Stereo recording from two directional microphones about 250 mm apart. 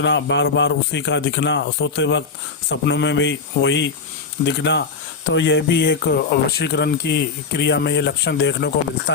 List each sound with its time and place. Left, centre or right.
0.0 s speech: left